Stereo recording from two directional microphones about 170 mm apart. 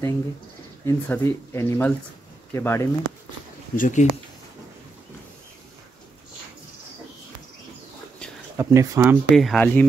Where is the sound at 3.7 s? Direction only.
50° left (ahead or behind).